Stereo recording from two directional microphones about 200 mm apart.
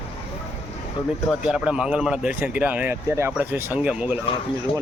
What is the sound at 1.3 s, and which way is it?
Speech, 5° right (ahead or behind).